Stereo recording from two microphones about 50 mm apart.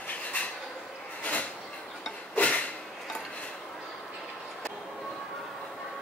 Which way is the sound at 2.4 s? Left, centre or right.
Left.